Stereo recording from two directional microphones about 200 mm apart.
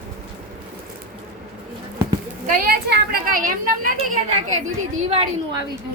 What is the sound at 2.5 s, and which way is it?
A woman's voice, 45° right (ahead or behind).